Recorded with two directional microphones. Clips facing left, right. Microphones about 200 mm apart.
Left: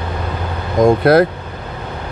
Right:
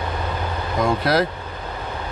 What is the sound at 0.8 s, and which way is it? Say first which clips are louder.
Speech: left 9 dB; 55° left (ahead or behind).